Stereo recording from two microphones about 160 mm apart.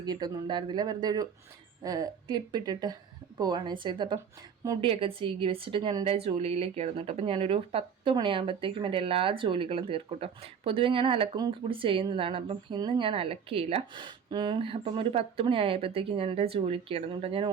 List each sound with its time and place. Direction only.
0.0 s a woman's voice: 25° right (ahead or behind)